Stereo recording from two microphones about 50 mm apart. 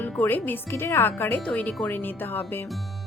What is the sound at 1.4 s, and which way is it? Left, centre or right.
Speech, left.